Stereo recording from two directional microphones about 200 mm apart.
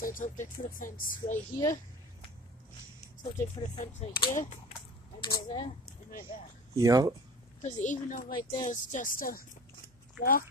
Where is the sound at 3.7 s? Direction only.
35° left (ahead or behind).